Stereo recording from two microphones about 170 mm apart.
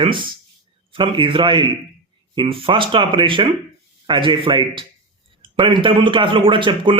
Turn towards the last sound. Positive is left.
turn(degrees=-30)  # may be behind; listen again after turning